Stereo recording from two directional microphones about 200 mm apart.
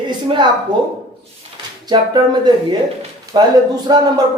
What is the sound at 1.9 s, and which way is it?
Speech, 20° right (ahead or behind).